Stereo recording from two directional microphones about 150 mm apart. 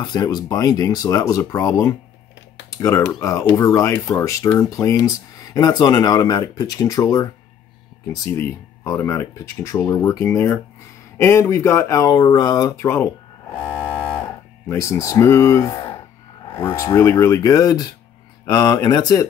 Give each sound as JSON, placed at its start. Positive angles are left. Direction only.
{"t": 0.0, "sound": "speech", "side_deg": 30}
{"t": 12.8, "sound": "a sound", "side_deg": 15}
{"t": 14.7, "sound": "speech", "side_deg": 20}